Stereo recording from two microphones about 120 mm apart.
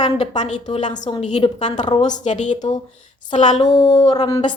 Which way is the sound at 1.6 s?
85° left.